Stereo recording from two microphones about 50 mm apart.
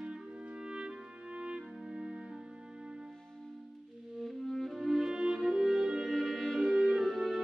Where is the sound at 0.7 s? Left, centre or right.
Centre.